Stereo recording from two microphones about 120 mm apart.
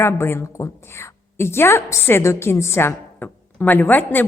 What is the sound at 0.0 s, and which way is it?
A woman's voice, 20° left (ahead or behind).